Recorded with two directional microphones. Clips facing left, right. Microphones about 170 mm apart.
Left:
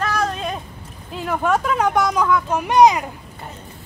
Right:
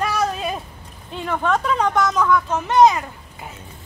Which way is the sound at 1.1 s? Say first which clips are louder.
Left 1 dB; 5° left (ahead or behind).